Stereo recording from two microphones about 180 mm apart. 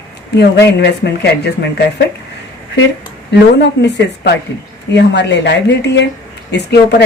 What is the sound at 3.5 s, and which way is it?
Speech, 70° left (ahead or behind).